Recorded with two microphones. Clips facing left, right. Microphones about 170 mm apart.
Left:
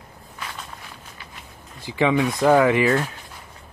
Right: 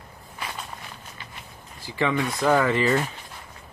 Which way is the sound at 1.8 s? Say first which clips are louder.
Left 5 dB; 15° left (ahead or behind).